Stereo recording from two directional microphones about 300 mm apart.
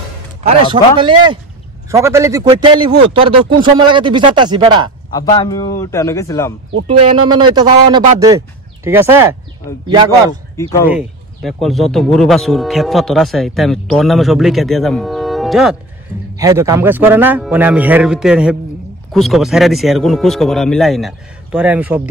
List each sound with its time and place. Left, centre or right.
0.9 s speech: centre
5.1 s a man's voice: centre
6.9 s speech: centre
10.9 s speech: centre